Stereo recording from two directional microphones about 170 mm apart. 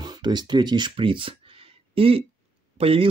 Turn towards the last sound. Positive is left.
turn(degrees=-35)  # may be behind; listen again after turning